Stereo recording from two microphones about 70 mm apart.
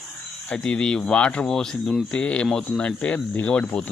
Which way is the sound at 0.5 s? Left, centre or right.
Centre.